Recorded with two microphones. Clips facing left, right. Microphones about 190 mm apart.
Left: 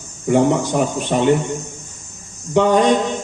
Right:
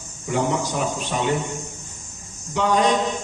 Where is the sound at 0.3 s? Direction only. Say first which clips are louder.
Left 8 dB; 55° left (ahead or behind).